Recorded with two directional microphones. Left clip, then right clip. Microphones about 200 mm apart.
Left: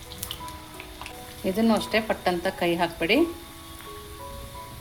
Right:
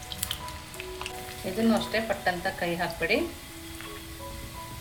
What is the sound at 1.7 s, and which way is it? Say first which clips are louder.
A woman's voice: left 3 dB; 40° left (ahead or behind).